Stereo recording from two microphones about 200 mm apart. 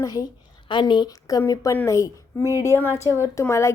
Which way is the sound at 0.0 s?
20° left (ahead or behind).